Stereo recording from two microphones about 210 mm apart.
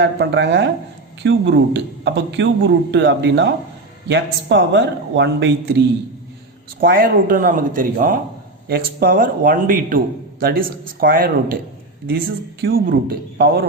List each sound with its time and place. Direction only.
0.0 s speech: 55° right (ahead or behind)
6.7 s a man's voice: 40° right (ahead or behind)